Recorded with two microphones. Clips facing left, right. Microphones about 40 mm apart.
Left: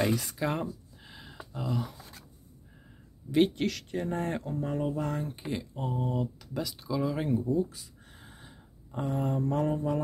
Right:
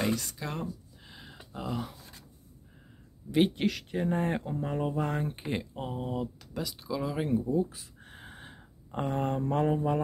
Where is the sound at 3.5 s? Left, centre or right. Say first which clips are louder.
Right 1 dB; centre.